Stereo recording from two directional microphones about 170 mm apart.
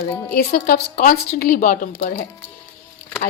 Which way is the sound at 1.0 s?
55° left (ahead or behind).